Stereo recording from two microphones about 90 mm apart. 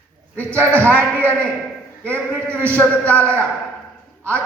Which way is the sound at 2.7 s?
15° left (ahead or behind).